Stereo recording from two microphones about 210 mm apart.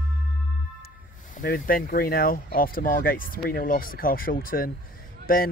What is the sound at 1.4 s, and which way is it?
Speech, 45° left (ahead or behind).